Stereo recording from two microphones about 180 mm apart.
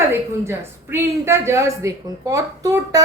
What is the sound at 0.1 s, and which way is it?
A woman's voice, 15° right (ahead or behind).